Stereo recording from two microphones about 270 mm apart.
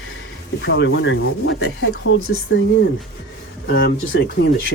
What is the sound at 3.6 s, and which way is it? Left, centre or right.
Speech, left.